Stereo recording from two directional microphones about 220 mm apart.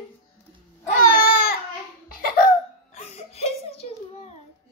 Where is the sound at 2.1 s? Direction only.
40° left (ahead or behind).